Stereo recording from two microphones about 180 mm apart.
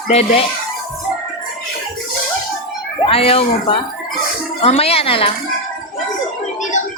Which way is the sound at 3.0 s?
30° left (ahead or behind).